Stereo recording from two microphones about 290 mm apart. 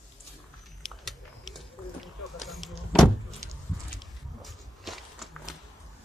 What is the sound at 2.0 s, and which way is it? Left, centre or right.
Vehicle, centre.